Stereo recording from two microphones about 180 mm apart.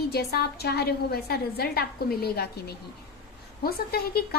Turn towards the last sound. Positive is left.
turn(degrees=60)  # may be behind; listen again after turning